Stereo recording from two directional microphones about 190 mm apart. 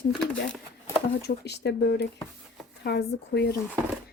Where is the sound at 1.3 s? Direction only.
60° left (ahead or behind).